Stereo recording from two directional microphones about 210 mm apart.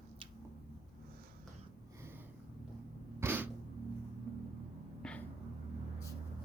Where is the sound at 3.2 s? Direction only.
10° right (ahead or behind).